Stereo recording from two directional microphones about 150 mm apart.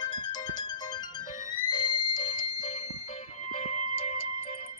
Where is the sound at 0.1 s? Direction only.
30° left (ahead or behind).